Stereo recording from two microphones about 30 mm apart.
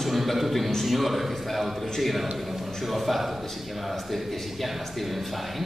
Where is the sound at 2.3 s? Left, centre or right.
Centre.